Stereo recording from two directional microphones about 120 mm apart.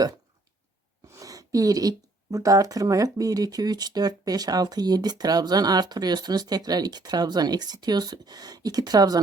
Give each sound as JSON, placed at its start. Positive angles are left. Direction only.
{"t": 1.1, "sound": "speech", "side_deg": -30}